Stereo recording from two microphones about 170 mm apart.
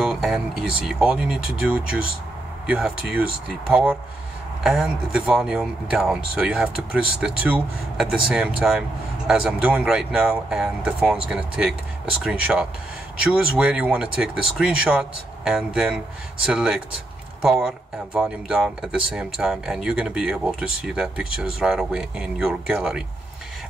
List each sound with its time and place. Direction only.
0.0 s speech: centre (ahead or behind)
4.6 s speech: 5° right (ahead or behind)